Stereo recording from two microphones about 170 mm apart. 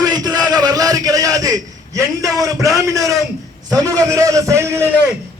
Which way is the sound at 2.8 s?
20° right (ahead or behind).